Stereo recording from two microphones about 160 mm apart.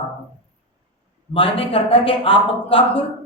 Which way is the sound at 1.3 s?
35° left (ahead or behind).